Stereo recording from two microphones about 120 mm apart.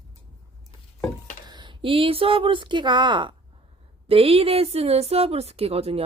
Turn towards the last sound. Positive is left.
turn(degrees=-55)  # may be behind; listen again after turning